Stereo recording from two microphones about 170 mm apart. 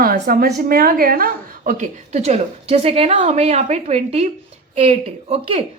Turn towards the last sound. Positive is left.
turn(degrees=-35)  # may be behind; listen again after turning